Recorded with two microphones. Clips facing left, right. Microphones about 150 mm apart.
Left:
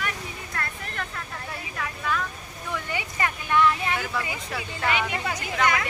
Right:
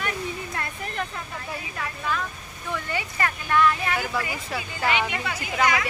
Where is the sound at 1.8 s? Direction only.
Centre (ahead or behind).